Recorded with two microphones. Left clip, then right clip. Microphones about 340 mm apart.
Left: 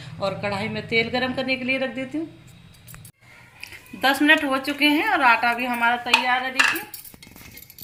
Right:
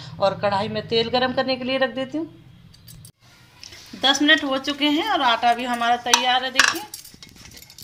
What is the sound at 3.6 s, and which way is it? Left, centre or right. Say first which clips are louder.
A woman's voice: even; right.